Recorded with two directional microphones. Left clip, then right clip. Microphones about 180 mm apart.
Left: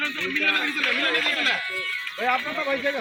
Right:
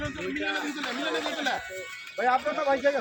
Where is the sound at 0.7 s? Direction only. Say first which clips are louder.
Left 8 dB; 60° right (ahead or behind).